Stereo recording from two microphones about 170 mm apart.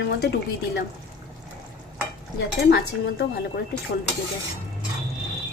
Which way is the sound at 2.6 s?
70° left (ahead or behind).